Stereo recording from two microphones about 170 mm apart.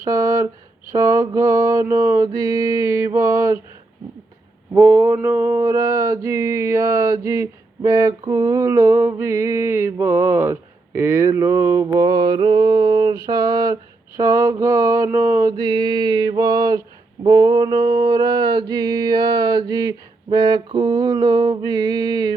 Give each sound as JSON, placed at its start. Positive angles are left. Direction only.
{"t": 0.0, "sound": "a sound", "side_deg": -20}
{"t": 0.9, "sound": "mantra", "side_deg": -20}
{"t": 4.7, "sound": "mantra", "side_deg": -20}